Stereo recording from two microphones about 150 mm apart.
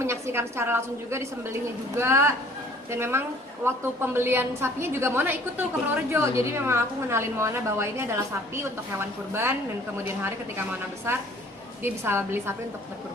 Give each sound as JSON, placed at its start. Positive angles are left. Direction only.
{"t": 0.0, "sound": "a woman's voice", "side_deg": -15}